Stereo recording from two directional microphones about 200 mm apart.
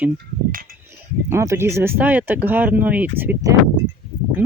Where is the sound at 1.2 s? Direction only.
15° right (ahead or behind).